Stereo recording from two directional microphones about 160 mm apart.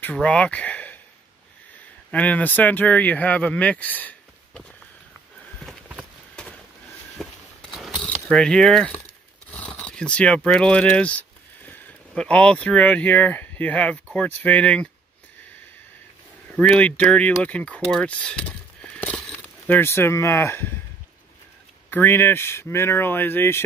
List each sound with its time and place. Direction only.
0.0 s speech: 10° left (ahead or behind)
2.0 s speech: 10° left (ahead or behind)
5.7 s a sound: 5° right (ahead or behind)
7.7 s mechanisms: centre (ahead or behind)
8.3 s speech: 5° left (ahead or behind)
16.5 s speech: 5° left (ahead or behind)
18.8 s a sound: 5° left (ahead or behind)
21.9 s speech: 10° left (ahead or behind)